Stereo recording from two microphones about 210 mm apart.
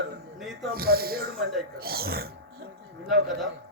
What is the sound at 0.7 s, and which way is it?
Speech, 45° right (ahead or behind).